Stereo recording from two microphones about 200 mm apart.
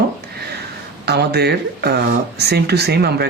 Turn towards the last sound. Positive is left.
turn(degrees=-55)  # may be behind; listen again after turning